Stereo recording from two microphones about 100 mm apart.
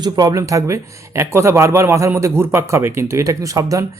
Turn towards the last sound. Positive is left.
turn(degrees=-35)  # may be behind; listen again after turning